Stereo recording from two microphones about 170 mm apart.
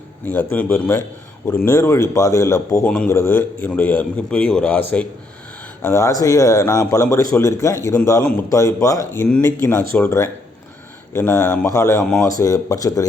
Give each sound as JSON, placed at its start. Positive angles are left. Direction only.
{"t": 0.5, "sound": "speech", "side_deg": 10}